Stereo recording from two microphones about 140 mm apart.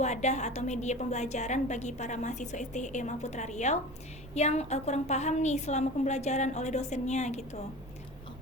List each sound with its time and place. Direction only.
0.0 s a woman's voice: 55° left (ahead or behind)